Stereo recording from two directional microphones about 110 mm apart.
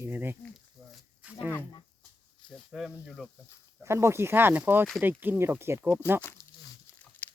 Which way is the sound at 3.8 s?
25° right (ahead or behind).